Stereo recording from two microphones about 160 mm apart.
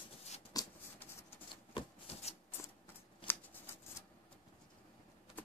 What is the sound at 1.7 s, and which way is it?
Rub, 40° left (ahead or behind).